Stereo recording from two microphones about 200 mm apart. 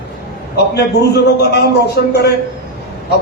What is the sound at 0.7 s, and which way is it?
A man's voice, 55° left (ahead or behind).